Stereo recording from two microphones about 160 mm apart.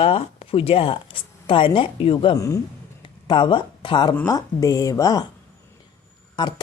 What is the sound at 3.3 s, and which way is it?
Speech, 30° left (ahead or behind).